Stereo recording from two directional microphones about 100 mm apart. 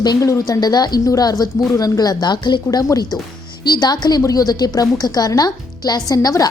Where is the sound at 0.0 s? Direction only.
40° left (ahead or behind).